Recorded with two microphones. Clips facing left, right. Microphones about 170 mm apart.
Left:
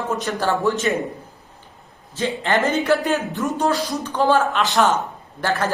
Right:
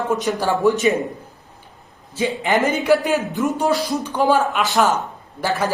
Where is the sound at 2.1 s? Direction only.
15° right (ahead or behind).